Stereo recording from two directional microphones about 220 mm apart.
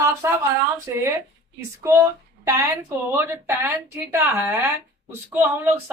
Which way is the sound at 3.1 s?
10° right (ahead or behind).